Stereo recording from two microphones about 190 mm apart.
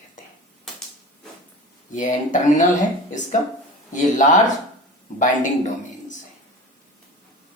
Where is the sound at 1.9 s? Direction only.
40° left (ahead or behind).